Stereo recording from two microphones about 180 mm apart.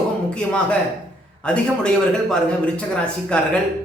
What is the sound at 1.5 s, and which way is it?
A man's voice, 5° left (ahead or behind).